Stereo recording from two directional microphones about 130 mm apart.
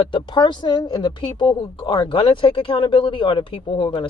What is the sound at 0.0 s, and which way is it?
Speech, 40° left (ahead or behind).